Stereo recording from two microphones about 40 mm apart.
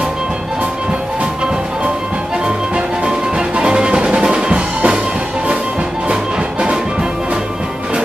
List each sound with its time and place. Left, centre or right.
2.4 s music: right